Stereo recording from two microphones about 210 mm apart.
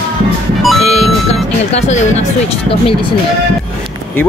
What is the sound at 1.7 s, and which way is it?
Speech, 30° left (ahead or behind).